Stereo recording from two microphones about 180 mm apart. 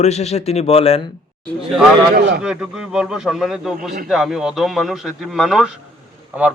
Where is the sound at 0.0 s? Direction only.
35° left (ahead or behind).